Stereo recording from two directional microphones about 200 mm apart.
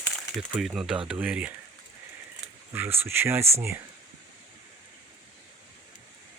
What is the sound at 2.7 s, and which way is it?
Speech, 10° right (ahead or behind).